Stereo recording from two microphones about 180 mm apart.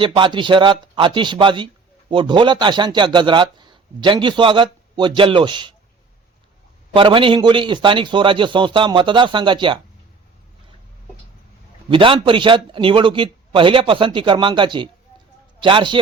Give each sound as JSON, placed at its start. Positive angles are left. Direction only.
{"t": 0.0, "sound": "speech", "side_deg": -25}
{"t": 6.9, "sound": "speech", "side_deg": -30}
{"t": 11.9, "sound": "speech", "side_deg": -30}